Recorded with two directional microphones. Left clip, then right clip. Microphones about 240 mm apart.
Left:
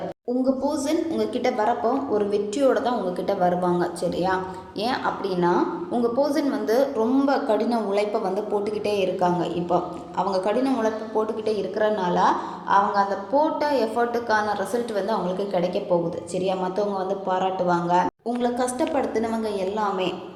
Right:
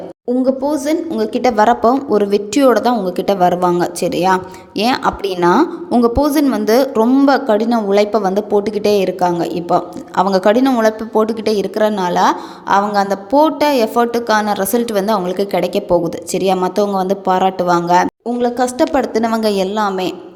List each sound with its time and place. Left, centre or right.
0.4 s a woman's voice: right